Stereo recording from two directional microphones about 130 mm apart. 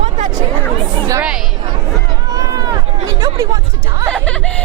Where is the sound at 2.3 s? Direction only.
30° right (ahead or behind).